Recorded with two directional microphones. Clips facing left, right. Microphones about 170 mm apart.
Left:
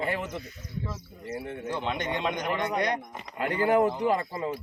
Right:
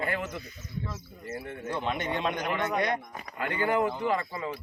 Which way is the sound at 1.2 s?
25° left (ahead or behind).